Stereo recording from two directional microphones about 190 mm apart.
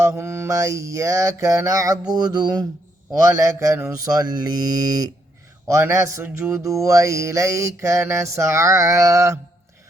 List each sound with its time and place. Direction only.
0.0 s mantra: 15° right (ahead or behind)